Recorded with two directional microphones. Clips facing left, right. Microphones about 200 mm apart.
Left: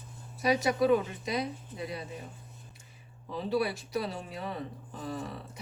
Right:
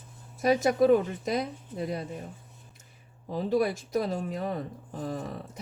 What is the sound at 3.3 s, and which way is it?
Speech, 45° right (ahead or behind).